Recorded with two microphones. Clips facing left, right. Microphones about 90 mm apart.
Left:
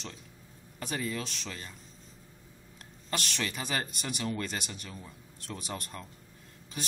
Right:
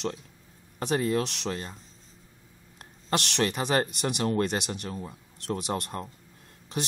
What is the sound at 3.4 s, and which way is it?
Speech, 45° right (ahead or behind).